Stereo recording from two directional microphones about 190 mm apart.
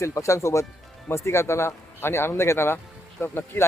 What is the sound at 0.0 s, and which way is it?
Speech, 15° left (ahead or behind).